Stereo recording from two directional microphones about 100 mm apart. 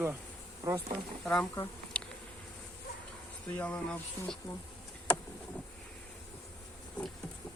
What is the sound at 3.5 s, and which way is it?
Speech, 15° left (ahead or behind).